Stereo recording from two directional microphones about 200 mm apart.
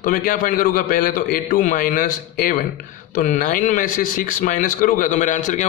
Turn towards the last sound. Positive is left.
turn(degrees=40)  # may be behind; listen again after turning